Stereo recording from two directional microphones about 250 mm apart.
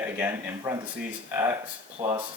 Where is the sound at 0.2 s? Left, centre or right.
Centre.